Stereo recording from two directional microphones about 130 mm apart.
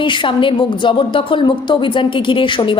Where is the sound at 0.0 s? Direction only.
40° left (ahead or behind).